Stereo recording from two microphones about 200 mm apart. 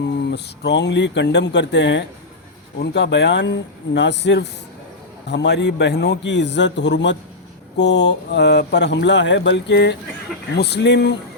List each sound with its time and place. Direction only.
0.3 s speech: 55° left (ahead or behind)